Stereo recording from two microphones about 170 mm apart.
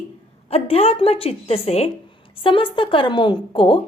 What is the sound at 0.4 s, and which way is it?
A woman's voice, 35° left (ahead or behind).